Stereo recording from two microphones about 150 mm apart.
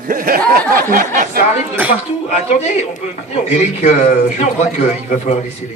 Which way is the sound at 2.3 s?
45° left (ahead or behind).